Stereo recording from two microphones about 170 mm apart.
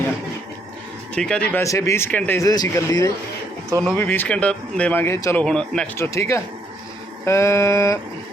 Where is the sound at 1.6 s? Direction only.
20° left (ahead or behind).